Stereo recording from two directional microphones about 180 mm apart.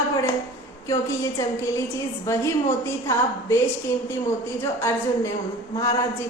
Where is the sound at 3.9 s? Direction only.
15° left (ahead or behind).